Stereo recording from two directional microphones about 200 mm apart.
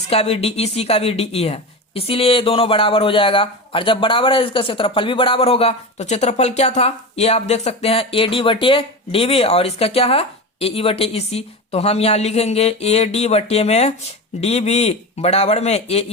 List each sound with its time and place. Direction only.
0.1 s speech: 30° left (ahead or behind)